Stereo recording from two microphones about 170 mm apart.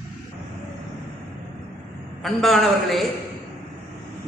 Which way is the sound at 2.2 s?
Centre (ahead or behind).